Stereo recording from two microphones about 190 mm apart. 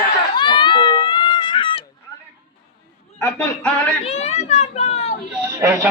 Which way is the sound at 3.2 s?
5° left (ahead or behind).